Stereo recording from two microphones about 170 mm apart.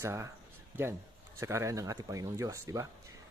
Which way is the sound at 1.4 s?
15° right (ahead or behind).